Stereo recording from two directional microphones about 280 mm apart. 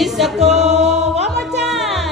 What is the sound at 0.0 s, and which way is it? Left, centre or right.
Music, centre.